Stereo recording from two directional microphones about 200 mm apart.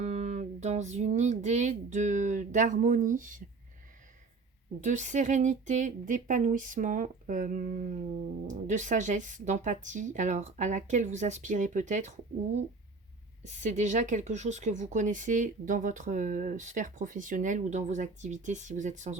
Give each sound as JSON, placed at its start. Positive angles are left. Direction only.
{"t": 0.0, "sound": "speech", "side_deg": -35}
{"t": 4.8, "sound": "speech", "side_deg": -40}